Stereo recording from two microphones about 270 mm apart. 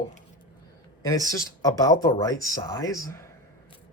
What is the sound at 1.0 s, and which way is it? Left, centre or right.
Speech, centre.